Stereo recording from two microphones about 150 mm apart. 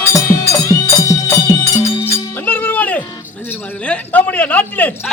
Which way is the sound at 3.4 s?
10° left (ahead or behind).